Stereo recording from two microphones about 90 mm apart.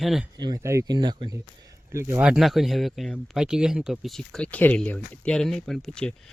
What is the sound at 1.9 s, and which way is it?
Speech, 30° right (ahead or behind).